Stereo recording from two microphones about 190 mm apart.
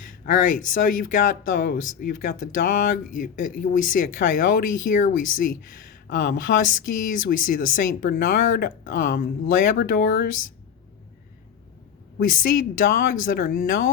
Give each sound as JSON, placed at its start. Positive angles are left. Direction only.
{"t": 0.3, "sound": "speech", "side_deg": 45}
{"t": 12.3, "sound": "speech", "side_deg": 50}